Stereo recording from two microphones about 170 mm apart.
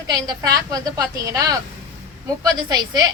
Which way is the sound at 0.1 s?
20° right (ahead or behind).